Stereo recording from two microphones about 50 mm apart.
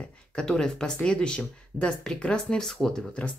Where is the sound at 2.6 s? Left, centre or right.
Centre.